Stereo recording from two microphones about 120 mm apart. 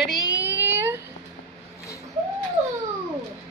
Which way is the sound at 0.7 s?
20° right (ahead or behind).